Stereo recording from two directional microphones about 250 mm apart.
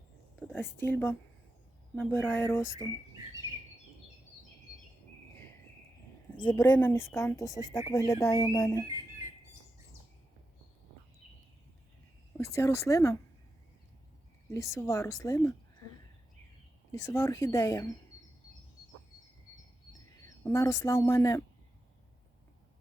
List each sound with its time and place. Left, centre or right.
0.3 s speech: centre
6.4 s speech: centre
12.4 s speech: centre
14.5 s speech: centre
16.9 s speech: centre
20.4 s speech: centre